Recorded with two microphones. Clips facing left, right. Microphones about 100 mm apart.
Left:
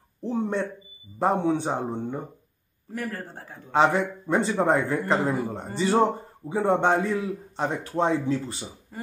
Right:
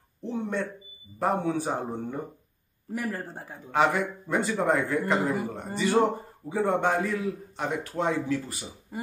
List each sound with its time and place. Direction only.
0.2 s a man's voice: 35° left (ahead or behind)
2.9 s speech: 10° right (ahead or behind)
3.7 s a man's voice: 30° left (ahead or behind)